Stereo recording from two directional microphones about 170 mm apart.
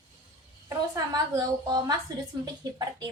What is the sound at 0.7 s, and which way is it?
A woman's voice, 20° right (ahead or behind).